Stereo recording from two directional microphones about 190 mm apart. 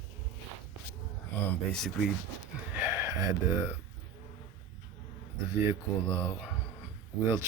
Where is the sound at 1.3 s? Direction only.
10° left (ahead or behind).